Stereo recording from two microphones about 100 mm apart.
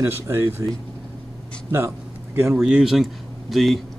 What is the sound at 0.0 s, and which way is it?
Speech, 25° right (ahead or behind).